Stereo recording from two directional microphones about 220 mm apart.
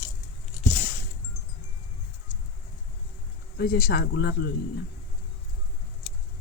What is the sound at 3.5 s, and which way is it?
Speech, 45° left (ahead or behind).